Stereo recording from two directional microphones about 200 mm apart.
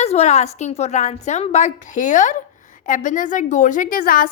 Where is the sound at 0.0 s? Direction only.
35° left (ahead or behind).